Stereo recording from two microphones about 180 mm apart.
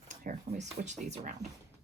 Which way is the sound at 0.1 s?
40° right (ahead or behind).